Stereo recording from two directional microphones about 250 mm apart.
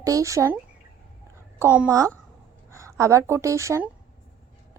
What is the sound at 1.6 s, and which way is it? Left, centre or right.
Speech, centre.